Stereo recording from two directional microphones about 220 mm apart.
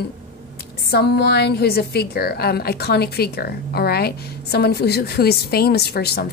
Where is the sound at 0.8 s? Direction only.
45° left (ahead or behind).